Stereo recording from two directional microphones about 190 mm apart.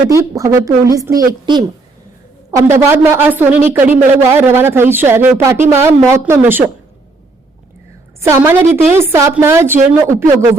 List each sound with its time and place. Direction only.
0.1 s speech: 15° right (ahead or behind)
8.2 s speech: 15° right (ahead or behind)